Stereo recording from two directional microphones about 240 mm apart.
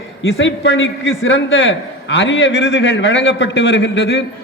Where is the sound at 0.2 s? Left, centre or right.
Left.